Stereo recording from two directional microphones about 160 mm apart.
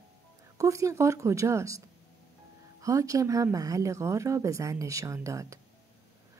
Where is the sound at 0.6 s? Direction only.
20° right (ahead or behind).